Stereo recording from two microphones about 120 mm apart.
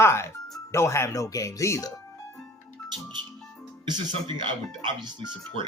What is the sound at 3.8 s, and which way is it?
Speech, 40° right (ahead or behind).